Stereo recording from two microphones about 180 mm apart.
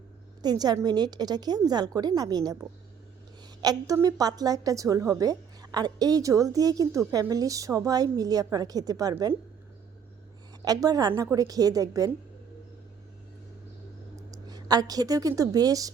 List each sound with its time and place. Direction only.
0.4 s a woman's voice: 20° right (ahead or behind)
3.6 s a woman's voice: 20° right (ahead or behind)
10.6 s a woman's voice: 20° right (ahead or behind)
14.2 s a woman's voice: 20° right (ahead or behind)